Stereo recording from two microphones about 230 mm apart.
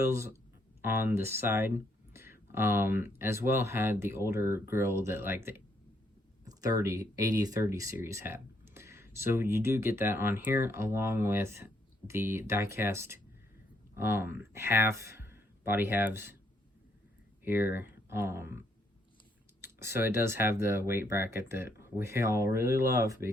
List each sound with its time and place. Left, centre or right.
0.0 s speech: centre
2.1 s a sound: centre
3.2 s speech: centre
17.4 s speech: centre
19.6 s speech: centre